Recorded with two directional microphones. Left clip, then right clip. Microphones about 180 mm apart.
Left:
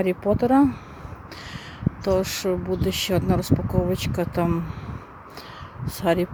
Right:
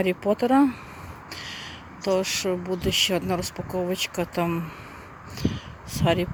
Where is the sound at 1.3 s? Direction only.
15° left (ahead or behind).